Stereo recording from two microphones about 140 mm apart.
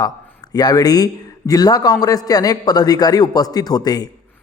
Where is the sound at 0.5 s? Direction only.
30° left (ahead or behind).